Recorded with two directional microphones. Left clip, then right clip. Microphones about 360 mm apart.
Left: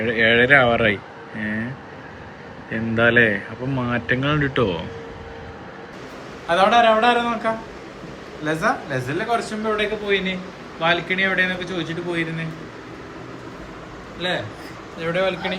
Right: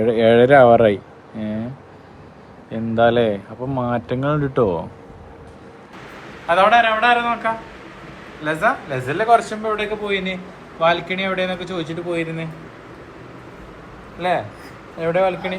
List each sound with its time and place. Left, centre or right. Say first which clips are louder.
0.0 s speech: right 3 dB; centre
2.6 s speech: right 2 dB; centre
6.5 s a man's voice: right 1 dB; centre
8.4 s speech: right 2 dB; centre
14.2 s speech: right 4 dB; centre